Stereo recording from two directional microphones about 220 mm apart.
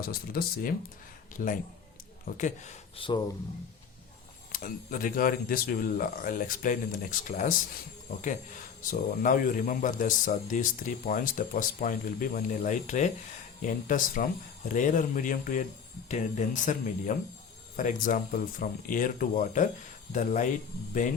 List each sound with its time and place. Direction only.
0.0 s speech: 45° left (ahead or behind); by 3.2 s 20° left (ahead or behind)
4.5 s speech: 40° left (ahead or behind)
8.8 s speech: 40° left (ahead or behind)